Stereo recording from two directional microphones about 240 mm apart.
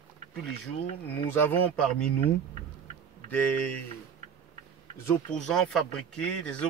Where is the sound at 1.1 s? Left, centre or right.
Centre.